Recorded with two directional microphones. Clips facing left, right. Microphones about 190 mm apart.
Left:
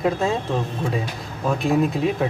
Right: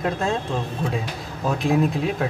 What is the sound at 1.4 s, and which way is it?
Speech, centre (ahead or behind).